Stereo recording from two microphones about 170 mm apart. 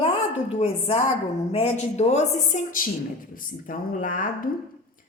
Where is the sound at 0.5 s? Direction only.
35° left (ahead or behind).